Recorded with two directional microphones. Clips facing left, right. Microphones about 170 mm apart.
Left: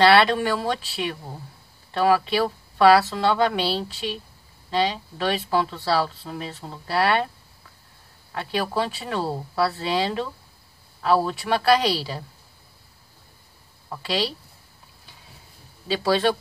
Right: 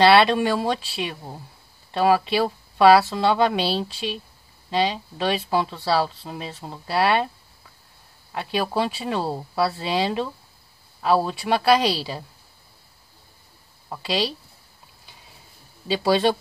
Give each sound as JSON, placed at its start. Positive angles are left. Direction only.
{"t": 0.1, "sound": "speech", "side_deg": -15}
{"t": 8.3, "sound": "speech", "side_deg": -10}
{"t": 15.9, "sound": "speech", "side_deg": -15}